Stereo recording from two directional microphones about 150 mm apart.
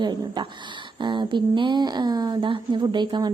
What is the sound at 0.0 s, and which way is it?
Speech, 30° right (ahead or behind).